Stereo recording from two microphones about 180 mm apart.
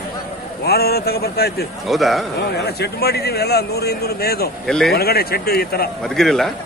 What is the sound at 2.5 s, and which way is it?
Speech, 65° left (ahead or behind).